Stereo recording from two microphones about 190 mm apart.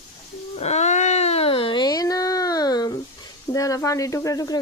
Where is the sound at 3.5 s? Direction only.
15° left (ahead or behind).